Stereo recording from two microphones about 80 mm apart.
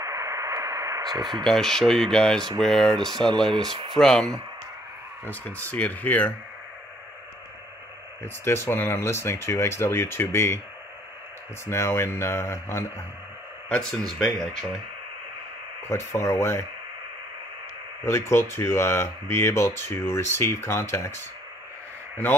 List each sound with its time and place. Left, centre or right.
0.0 s radio: right
1.4 s speech: centre
5.2 s speech: left
8.2 s speech: left
11.6 s speech: left
13.7 s speech: centre
15.9 s speech: left
18.0 s speech: left